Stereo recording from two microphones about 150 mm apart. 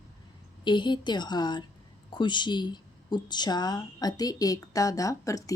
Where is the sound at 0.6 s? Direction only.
30° left (ahead or behind).